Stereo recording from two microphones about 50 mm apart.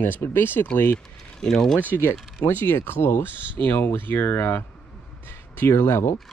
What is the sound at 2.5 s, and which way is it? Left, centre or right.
Speech, left.